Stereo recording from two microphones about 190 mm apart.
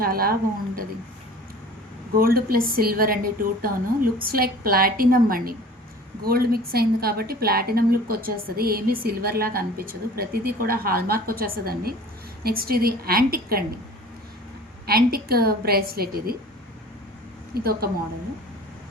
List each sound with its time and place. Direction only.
0.0 s a woman's voice: 50° right (ahead or behind)
2.1 s a woman's voice: 50° right (ahead or behind)
14.8 s a woman's voice: 55° right (ahead or behind)
17.5 s a woman's voice: 55° right (ahead or behind)